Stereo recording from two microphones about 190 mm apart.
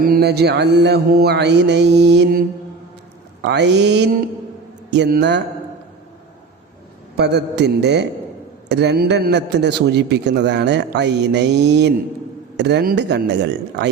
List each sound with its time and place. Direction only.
0.0 s a man's voice: 55° right (ahead or behind)
3.4 s a man's voice: 65° right (ahead or behind)
7.2 s a man's voice: 60° right (ahead or behind)